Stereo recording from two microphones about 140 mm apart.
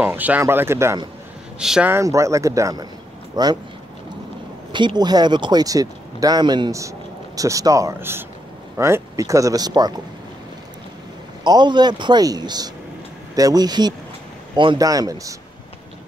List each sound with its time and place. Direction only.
0.0 s speech: 15° right (ahead or behind)
1.6 s speech: 5° right (ahead or behind)
1.9 s speech: 20° right (ahead or behind)
4.7 s speech: 30° right (ahead or behind)
11.4 s a man's voice: 30° right (ahead or behind)